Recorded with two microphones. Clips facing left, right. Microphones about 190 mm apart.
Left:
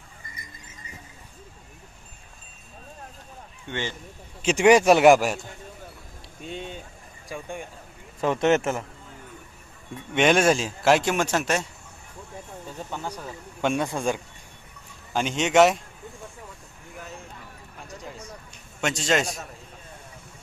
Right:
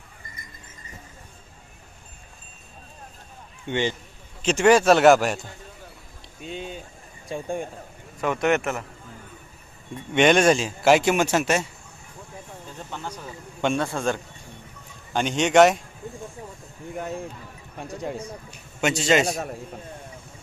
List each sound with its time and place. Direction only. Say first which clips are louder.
3.7 s speech: right 7 dB; 20° right (ahead or behind)
4.4 s speech: even; 15° left (ahead or behind)
6.4 s a man's voice: right 1 dB; centre (ahead or behind)
7.3 s speech: right 6 dB; 30° right (ahead or behind)
8.2 s a man's voice: left 1 dB; 30° left (ahead or behind)
9.9 s a man's voice: right 2 dB; centre (ahead or behind)
12.9 s a man's voice: even; 10° left (ahead or behind)
15.1 s a man's voice: right 2 dB; centre (ahead or behind)
16.9 s a man's voice: right 10 dB; 60° right (ahead or behind)
18.8 s a man's voice: right 4 dB; 5° right (ahead or behind)
19.3 s a man's voice: right 8 dB; 55° right (ahead or behind)